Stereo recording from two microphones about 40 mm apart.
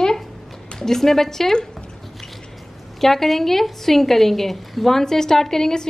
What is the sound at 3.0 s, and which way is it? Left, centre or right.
Speech, centre.